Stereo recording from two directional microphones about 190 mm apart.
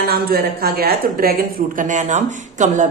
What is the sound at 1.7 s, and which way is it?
Speech, 40° right (ahead or behind).